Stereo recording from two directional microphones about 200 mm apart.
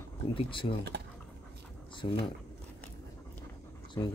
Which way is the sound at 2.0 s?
25° left (ahead or behind).